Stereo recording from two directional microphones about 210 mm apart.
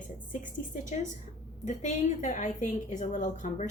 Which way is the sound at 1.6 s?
35° left (ahead or behind).